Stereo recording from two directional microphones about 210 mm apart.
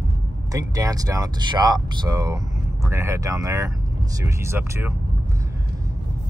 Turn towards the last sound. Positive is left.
turn(degrees=-15)  # may be behind; listen again after turning